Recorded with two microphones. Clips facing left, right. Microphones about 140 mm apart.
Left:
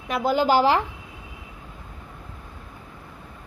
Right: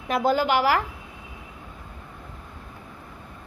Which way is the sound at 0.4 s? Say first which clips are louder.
Left 3 dB; 30° left (ahead or behind).